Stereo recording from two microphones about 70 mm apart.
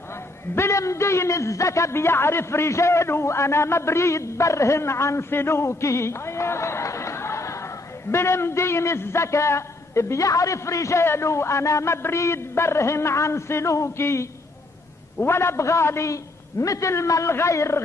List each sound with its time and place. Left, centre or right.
0.6 s a man's voice: left